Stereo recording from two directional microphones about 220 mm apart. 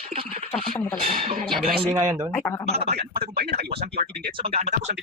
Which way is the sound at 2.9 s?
45° right (ahead or behind).